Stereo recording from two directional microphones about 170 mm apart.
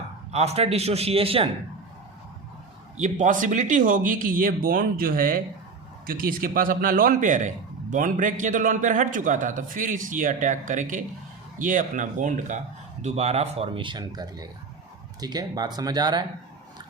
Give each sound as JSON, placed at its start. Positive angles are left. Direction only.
{"t": 0.3, "sound": "speech", "side_deg": -40}
{"t": 3.0, "sound": "a man's voice", "side_deg": -45}